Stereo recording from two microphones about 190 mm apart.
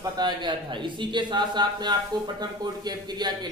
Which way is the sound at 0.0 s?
20° right (ahead or behind).